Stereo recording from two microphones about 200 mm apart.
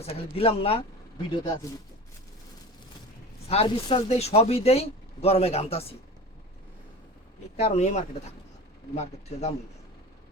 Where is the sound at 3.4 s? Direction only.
30° left (ahead or behind).